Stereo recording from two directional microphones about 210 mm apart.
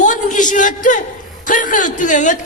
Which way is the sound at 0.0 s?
35° left (ahead or behind).